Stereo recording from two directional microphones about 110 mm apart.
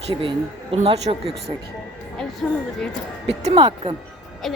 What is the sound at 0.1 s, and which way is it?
Speech, 55° right (ahead or behind).